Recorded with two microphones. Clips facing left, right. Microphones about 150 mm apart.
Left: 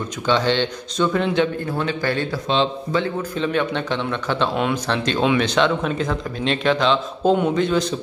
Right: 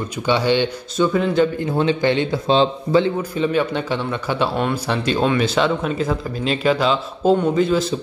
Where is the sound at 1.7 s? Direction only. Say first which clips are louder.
Right 5 dB; 25° right (ahead or behind).